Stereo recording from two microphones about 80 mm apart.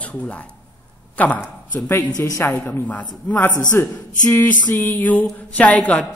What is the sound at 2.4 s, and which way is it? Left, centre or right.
A woman's voice, centre.